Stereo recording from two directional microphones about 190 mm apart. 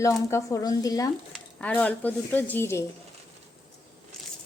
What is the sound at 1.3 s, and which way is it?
Speech, 5° left (ahead or behind).